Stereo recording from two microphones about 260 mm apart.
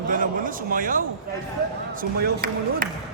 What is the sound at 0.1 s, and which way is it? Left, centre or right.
Speech, right.